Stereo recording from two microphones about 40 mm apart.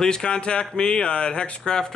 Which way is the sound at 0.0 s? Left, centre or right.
Left.